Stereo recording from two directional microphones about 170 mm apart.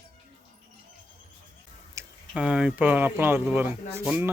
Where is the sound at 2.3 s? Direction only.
5° right (ahead or behind).